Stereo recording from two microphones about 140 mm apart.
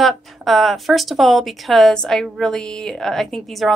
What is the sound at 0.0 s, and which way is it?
A woman's voice, centre (ahead or behind).